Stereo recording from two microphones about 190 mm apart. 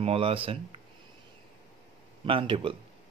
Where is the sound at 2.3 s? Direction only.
25° right (ahead or behind).